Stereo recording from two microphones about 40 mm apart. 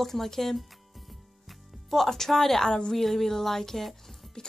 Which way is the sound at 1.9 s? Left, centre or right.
Centre.